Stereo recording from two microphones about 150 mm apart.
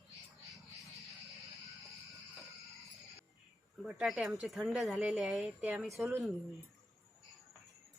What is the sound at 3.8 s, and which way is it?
Speech, centre (ahead or behind).